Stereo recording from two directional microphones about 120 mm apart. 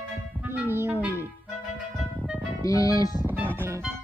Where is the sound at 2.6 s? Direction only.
30° left (ahead or behind).